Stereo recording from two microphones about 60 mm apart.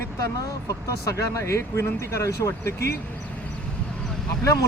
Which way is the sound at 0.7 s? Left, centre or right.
Left.